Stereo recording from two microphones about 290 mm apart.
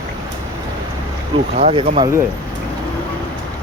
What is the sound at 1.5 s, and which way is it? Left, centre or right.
Speech, right.